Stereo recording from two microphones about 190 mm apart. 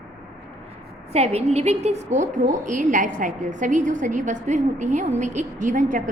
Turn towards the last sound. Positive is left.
turn(degrees=-45)  # may be behind; listen again after turning